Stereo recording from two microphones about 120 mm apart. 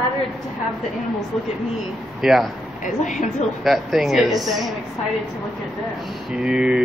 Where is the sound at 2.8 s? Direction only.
90° left.